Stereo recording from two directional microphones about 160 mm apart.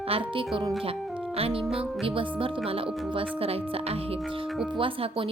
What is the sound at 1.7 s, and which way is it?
A woman's voice, 35° right (ahead or behind).